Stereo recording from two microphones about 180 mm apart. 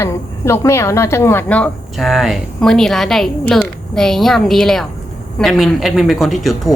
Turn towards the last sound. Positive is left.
turn(degrees=0)  # may be behind; listen again after turning